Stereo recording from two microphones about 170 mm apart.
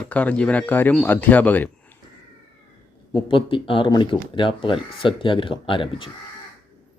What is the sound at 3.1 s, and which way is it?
Speech, 30° left (ahead or behind).